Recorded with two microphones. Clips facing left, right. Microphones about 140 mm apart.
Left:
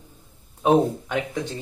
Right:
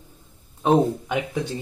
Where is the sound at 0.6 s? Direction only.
Centre (ahead or behind).